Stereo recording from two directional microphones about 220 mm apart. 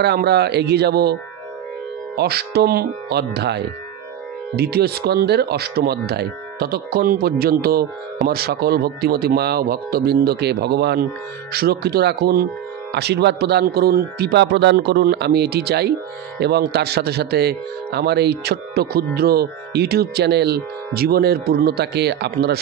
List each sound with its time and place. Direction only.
0.0 s speech: 45° right (ahead or behind)
2.1 s speech: 45° right (ahead or behind)